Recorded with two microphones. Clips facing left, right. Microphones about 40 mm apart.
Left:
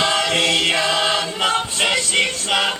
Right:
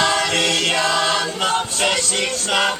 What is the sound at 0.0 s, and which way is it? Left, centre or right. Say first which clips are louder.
Choir: even; left.